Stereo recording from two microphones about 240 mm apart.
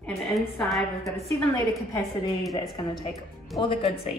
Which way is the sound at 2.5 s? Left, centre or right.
Centre.